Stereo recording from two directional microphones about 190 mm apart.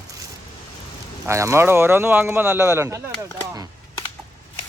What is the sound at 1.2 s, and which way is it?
Speech, 15° right (ahead or behind).